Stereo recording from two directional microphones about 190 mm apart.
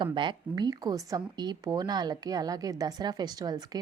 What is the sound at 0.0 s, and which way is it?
A woman's voice, 25° right (ahead or behind).